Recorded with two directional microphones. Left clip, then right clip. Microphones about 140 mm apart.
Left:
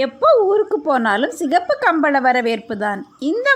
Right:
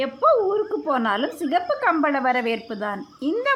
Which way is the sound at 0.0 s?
30° left (ahead or behind).